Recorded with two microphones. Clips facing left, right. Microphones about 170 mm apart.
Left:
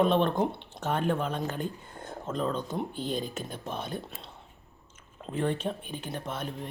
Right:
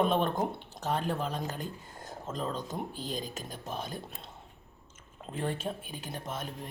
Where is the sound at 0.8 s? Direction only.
Centre (ahead or behind).